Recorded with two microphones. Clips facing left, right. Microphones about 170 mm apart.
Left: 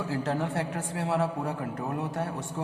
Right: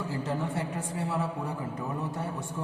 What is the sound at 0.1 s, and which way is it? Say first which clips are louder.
A man's voice: left 4 dB; 90° left.